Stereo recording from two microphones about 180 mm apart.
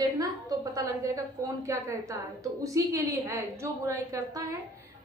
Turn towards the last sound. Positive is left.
turn(degrees=-15)  # may be behind; listen again after turning